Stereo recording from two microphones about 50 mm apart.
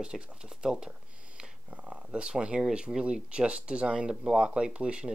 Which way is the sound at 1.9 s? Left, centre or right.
Right.